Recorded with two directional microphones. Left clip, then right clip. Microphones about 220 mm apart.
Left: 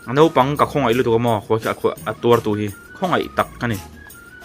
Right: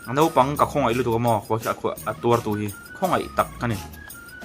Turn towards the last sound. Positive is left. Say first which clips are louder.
# left 3 dB
turn(degrees=15)  # may be behind; listen again after turning